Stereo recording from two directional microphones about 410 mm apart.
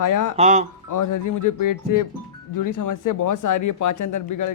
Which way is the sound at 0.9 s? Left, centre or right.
Left.